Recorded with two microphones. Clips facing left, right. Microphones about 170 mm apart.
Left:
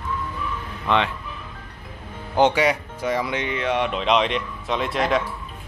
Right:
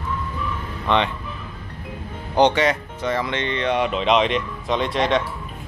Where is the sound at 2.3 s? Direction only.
5° left (ahead or behind).